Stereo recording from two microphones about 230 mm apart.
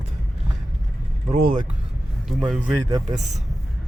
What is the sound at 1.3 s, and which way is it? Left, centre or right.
Speech, right.